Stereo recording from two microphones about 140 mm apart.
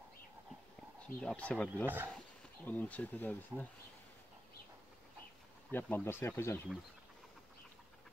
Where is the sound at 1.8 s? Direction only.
15° right (ahead or behind).